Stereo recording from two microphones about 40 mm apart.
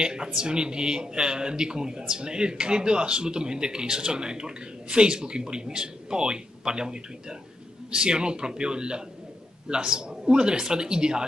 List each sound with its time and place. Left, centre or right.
0.0 s speech: centre